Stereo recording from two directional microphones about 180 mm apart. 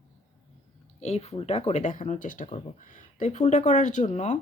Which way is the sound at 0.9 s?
35° left (ahead or behind).